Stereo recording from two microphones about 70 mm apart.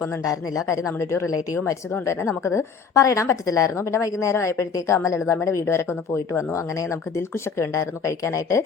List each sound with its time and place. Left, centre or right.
0.3 s a woman's voice: left